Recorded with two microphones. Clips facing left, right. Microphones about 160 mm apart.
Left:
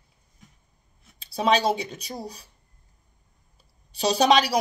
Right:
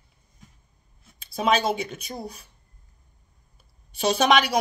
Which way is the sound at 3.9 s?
35° left (ahead or behind).